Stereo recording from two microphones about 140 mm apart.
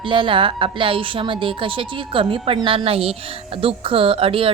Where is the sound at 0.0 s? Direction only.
35° right (ahead or behind).